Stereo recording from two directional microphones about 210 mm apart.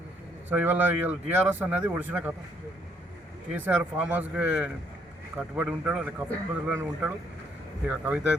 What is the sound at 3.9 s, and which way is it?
A man's voice, 5° right (ahead or behind).